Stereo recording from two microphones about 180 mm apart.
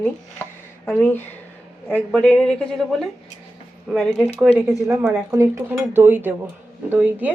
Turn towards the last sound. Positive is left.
turn(degrees=-10)  # may be behind; listen again after turning